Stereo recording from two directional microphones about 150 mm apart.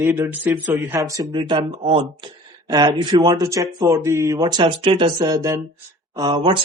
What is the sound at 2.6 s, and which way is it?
Speech, 25° right (ahead or behind).